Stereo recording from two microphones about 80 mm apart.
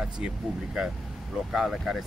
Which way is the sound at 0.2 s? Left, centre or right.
Centre.